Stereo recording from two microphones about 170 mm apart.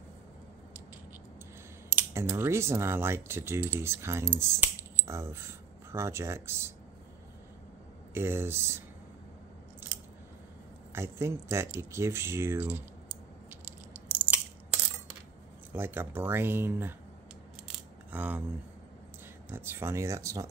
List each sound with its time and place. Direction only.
2.0 s speech: 15° right (ahead or behind)
8.1 s speech: 15° right (ahead or behind)
10.9 s a sound: 15° right (ahead or behind)
15.7 s speech: 15° right (ahead or behind)
17.6 s scissors: 10° right (ahead or behind)
19.5 s speech: 15° right (ahead or behind)